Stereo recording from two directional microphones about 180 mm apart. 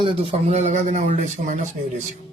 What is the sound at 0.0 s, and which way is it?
Speech, 30° right (ahead or behind).